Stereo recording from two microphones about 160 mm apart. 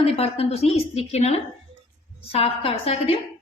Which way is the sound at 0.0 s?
40° left (ahead or behind).